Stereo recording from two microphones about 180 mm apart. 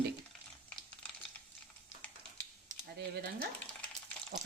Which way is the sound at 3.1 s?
60° right (ahead or behind).